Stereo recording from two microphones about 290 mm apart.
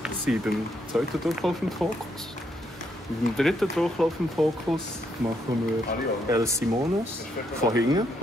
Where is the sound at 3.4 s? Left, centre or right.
Centre.